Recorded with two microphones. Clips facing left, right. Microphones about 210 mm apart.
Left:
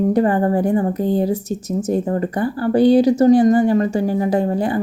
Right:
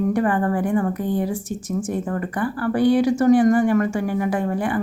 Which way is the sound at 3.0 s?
40° left (ahead or behind).